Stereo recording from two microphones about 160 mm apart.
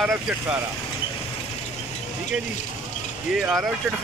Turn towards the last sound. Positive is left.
turn(degrees=-5)  # may be behind; listen again after turning